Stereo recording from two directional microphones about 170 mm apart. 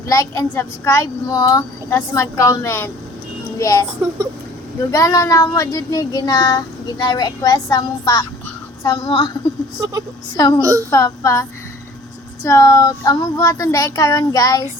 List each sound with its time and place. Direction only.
0.1 s speech: 20° left (ahead or behind)
4.9 s speech: 20° left (ahead or behind)
10.3 s speech: 20° left (ahead or behind)
10.6 s a woman's voice: 20° right (ahead or behind)
10.9 s speech: 20° left (ahead or behind)